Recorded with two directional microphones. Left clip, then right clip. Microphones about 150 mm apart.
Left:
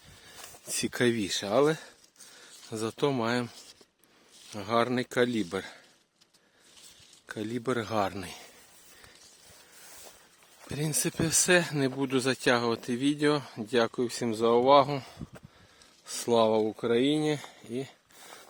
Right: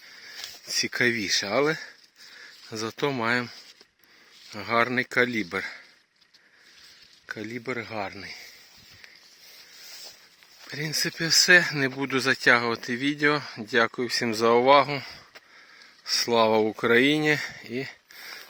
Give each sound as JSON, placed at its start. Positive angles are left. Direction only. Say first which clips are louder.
{"t": 0.7, "sound": "speech", "louder": "right 4 dB", "side_deg": 20}
{"t": 1.4, "sound": "speech", "louder": "left 1 dB", "side_deg": 5}
{"t": 2.7, "sound": "speech", "louder": "right 1 dB", "side_deg": 10}
{"t": 4.5, "sound": "speech", "louder": "right 4 dB", "side_deg": 5}
{"t": 7.3, "sound": "a man's voice", "louder": "right 1 dB", "side_deg": 20}
{"t": 7.6, "sound": "speech", "louder": "left 4 dB", "side_deg": 35}
{"t": 10.8, "sound": "speech", "louder": "right 3 dB", "side_deg": 20}
{"t": 11.4, "sound": "speech", "louder": "right 6 dB", "side_deg": 10}
{"t": 14.3, "sound": "speech", "louder": "right 3 dB", "side_deg": -5}
{"t": 16.2, "sound": "speech", "louder": "right 2 dB", "side_deg": 0}
{"t": 16.6, "sound": "speech", "louder": "right 6 dB", "side_deg": -15}